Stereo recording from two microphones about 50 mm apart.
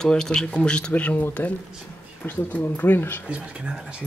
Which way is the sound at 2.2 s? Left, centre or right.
Left.